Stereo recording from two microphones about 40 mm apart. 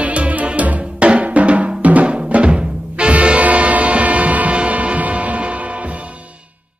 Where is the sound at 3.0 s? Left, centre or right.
Right.